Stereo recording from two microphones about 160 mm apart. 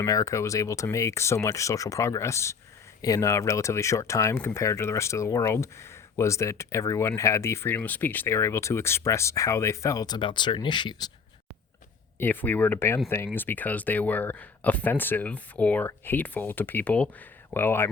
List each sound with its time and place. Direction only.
0.0 s speech: 20° left (ahead or behind)
12.2 s speech: 10° left (ahead or behind)